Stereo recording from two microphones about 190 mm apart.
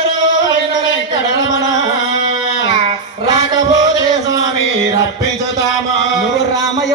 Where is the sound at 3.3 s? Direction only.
20° right (ahead or behind).